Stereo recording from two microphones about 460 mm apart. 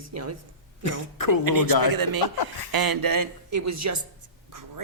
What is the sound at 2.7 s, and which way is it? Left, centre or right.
A man's voice, right.